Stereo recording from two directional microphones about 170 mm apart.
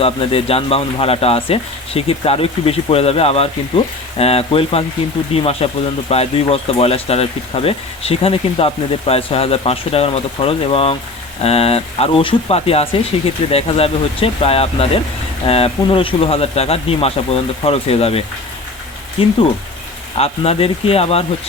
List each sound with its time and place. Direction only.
0.0 s speech: 35° left (ahead or behind)
19.2 s speech: 35° left (ahead or behind)